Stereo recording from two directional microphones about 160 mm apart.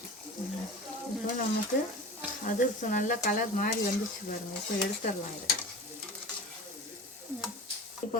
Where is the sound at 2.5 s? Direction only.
50° left (ahead or behind).